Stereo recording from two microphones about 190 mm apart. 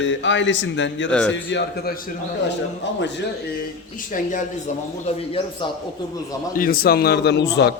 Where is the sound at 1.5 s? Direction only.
55° left (ahead or behind).